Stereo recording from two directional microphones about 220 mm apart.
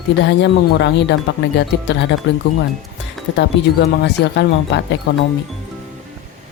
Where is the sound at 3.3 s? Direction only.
50° left (ahead or behind).